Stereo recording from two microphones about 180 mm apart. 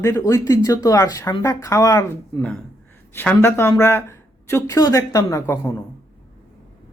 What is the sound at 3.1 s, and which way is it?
Speech, 10° left (ahead or behind).